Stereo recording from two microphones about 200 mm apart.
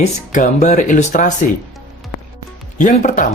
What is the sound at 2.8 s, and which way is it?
Speech, 40° left (ahead or behind).